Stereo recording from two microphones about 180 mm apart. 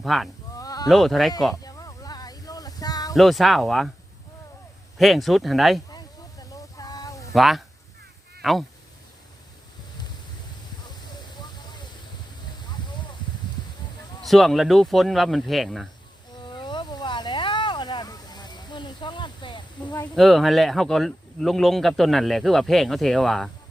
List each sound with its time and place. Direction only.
0.0 s speech: centre (ahead or behind)
0.5 s sheep: 20° left (ahead or behind)
0.9 s speech: centre (ahead or behind)
1.6 s a sound: 20° left (ahead or behind)
3.2 s speech: centre (ahead or behind)
4.9 s speech: centre (ahead or behind)
6.5 s a sound: 20° left (ahead or behind)
7.3 s speech: centre (ahead or behind)
14.2 s speech: centre (ahead or behind)
16.4 s insect: 25° left (ahead or behind)
20.1 s speech: centre (ahead or behind)